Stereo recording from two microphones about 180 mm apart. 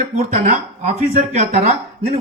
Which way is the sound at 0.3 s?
40° right (ahead or behind).